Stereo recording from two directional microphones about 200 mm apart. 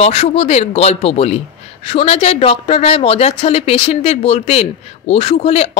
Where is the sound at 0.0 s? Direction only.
30° left (ahead or behind).